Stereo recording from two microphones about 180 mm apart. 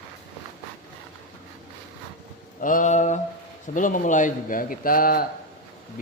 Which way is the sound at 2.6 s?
50° left (ahead or behind).